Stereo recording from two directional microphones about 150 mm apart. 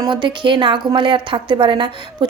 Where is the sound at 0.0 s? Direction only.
30° right (ahead or behind).